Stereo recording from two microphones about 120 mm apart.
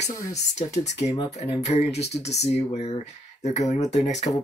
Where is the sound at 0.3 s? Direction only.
70° left (ahead or behind).